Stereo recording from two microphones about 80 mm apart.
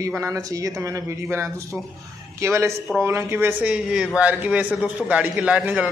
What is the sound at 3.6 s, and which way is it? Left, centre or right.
A man's voice, centre.